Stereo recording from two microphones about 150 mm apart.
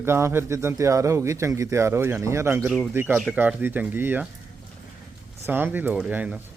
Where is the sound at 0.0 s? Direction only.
15° right (ahead or behind).